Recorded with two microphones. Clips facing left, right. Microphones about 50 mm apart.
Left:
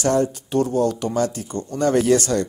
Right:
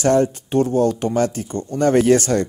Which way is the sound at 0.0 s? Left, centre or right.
Right.